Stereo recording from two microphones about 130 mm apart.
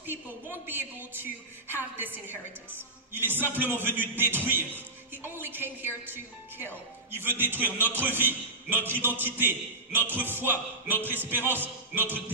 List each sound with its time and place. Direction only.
0.0 s a man's voice: 15° right (ahead or behind)
7.2 s a man's voice: 15° right (ahead or behind)